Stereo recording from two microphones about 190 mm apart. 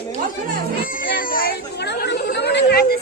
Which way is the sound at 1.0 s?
50° left (ahead or behind).